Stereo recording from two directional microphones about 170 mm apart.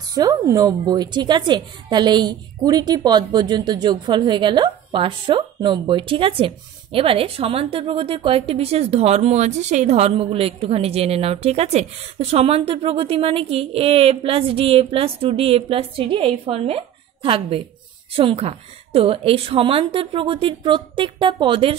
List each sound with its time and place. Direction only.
0.1 s a woman's voice: 20° right (ahead or behind)